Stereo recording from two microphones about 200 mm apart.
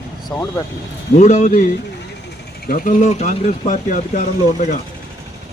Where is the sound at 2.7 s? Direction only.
45° left (ahead or behind).